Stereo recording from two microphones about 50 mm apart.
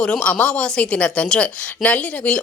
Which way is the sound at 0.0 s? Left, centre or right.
Left.